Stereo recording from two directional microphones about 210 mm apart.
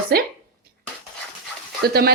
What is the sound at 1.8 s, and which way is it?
Speech, 50° right (ahead or behind).